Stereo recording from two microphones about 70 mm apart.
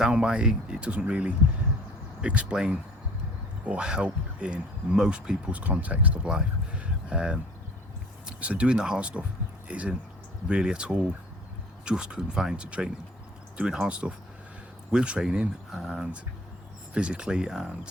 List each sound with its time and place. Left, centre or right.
0.0 s speech: centre
8.4 s speech: centre